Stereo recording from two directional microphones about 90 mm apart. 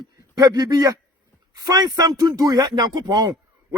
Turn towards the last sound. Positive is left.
turn(degrees=-45)  # may be behind; listen again after turning